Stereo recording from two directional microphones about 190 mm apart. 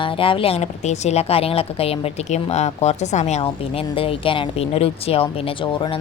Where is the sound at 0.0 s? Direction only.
25° left (ahead or behind).